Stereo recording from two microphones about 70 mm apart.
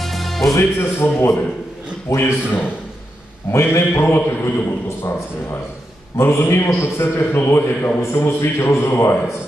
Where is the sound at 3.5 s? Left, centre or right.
Left.